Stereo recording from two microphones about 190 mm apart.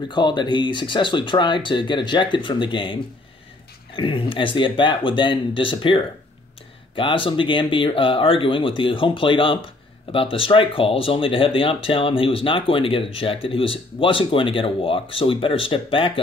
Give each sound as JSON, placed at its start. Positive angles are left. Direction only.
{"t": 0.1, "sound": "speech", "side_deg": 25}